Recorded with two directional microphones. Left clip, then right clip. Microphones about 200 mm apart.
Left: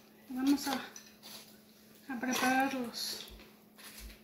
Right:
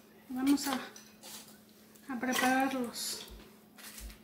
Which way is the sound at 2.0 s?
5° left (ahead or behind).